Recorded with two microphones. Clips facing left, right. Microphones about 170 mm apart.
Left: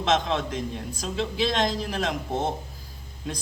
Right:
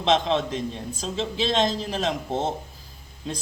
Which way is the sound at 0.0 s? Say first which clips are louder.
Right 2 dB; 20° right (ahead or behind).